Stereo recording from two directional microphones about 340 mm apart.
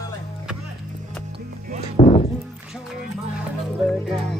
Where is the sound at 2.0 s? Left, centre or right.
Centre.